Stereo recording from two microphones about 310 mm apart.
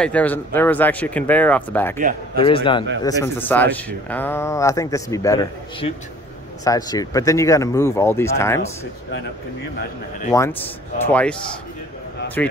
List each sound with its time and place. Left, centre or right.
0.0 s speech: centre
2.4 s speech: centre
10.3 s speech: centre
12.4 s speech: centre